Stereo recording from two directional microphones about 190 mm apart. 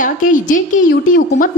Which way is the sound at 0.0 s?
45° left (ahead or behind).